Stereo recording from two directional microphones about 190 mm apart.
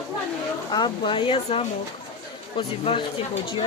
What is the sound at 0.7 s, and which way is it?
Speech, 25° left (ahead or behind).